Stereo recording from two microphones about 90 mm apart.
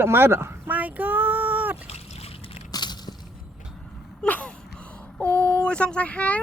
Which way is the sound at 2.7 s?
50° left (ahead or behind).